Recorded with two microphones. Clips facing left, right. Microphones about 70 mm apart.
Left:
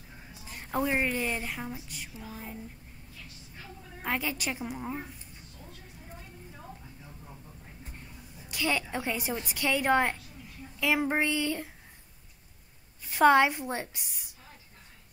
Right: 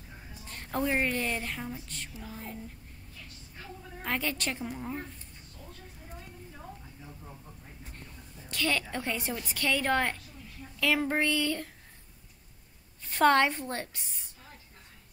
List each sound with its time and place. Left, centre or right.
0.3 s a woman's voice: centre
4.0 s a woman's voice: centre
7.9 s a sound: centre
8.9 s a woman's voice: centre
13.0 s a woman's voice: centre